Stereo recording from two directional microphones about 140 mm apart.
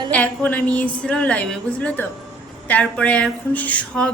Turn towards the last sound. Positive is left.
turn(degrees=10)  # may be behind; listen again after turning